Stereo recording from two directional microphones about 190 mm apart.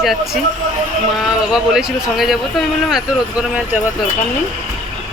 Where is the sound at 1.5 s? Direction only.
5° right (ahead or behind).